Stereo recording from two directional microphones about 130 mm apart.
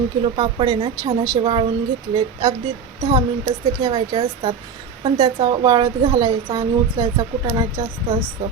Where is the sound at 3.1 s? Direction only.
45° right (ahead or behind).